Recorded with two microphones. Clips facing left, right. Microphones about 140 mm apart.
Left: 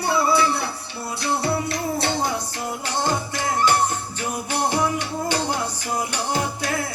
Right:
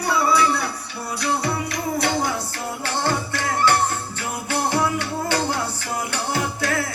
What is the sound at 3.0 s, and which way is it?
Music, 15° left (ahead or behind).